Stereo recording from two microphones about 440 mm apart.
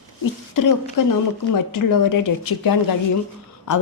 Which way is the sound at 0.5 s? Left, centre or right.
Left.